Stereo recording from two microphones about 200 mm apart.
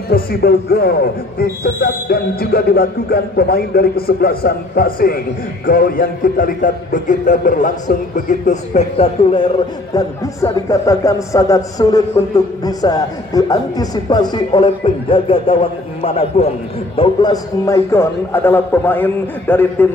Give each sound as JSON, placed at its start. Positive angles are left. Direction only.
{"t": 0.1, "sound": "speech", "side_deg": 50}
{"t": 9.9, "sound": "a man's voice", "side_deg": 15}